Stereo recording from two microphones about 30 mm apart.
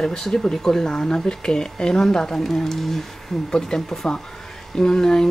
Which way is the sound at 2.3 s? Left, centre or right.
Centre.